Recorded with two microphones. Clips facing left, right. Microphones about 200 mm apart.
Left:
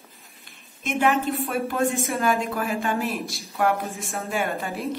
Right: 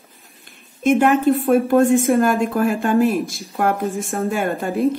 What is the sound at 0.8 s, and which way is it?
Speech, 50° right (ahead or behind).